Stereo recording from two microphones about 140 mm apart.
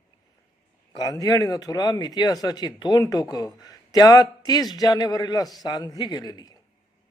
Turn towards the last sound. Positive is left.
turn(degrees=30)  # may be behind; listen again after turning